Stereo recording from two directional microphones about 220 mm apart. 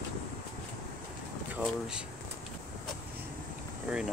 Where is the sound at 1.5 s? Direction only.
5° right (ahead or behind).